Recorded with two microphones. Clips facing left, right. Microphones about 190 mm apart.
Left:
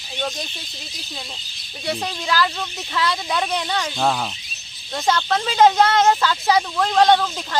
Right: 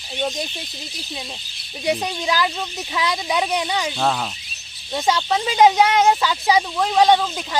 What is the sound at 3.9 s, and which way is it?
Speech, centre (ahead or behind).